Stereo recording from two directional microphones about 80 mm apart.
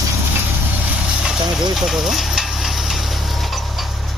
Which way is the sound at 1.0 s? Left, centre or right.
Centre.